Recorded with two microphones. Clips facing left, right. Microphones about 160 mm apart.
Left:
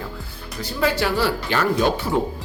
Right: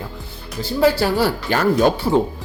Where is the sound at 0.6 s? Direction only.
30° right (ahead or behind).